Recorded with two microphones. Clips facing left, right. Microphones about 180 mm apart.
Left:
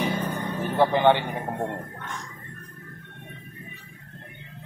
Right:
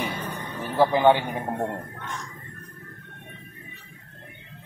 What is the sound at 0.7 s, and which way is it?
Speech, 10° right (ahead or behind).